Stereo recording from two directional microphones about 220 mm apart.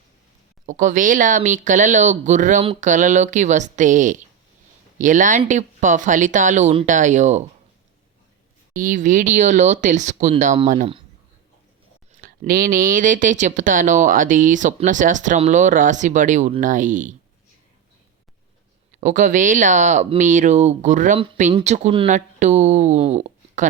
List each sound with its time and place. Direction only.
0.6 s speech: 35° right (ahead or behind)
8.7 s speech: 35° right (ahead or behind)
12.2 s speech: 40° right (ahead or behind)
18.9 s speech: 35° right (ahead or behind)